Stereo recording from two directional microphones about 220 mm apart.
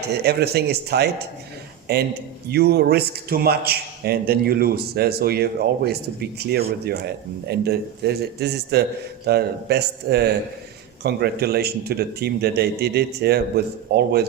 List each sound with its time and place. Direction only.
0.1 s a man's voice: 45° right (ahead or behind)